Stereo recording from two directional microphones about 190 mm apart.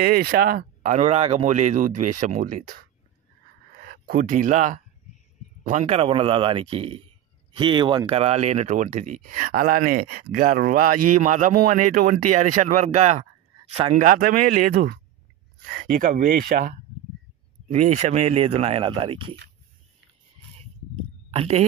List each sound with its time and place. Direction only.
0.0 s a man's voice: 50° right (ahead or behind); by 13.9 s 30° right (ahead or behind)
13.9 s speech: 45° right (ahead or behind); by 19.3 s 25° right (ahead or behind)
21.4 s speech: 30° right (ahead or behind)